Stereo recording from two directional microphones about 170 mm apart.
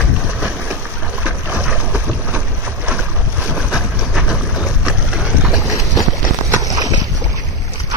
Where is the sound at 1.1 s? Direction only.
10° right (ahead or behind).